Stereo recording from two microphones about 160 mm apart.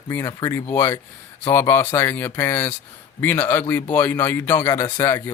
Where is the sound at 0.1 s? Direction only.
20° left (ahead or behind).